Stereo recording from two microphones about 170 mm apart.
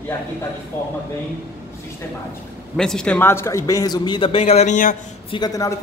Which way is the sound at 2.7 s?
5° left (ahead or behind).